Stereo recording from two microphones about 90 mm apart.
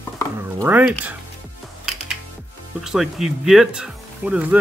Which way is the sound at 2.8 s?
5° right (ahead or behind).